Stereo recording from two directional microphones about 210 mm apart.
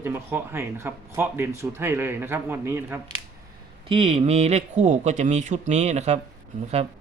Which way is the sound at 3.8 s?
25° right (ahead or behind).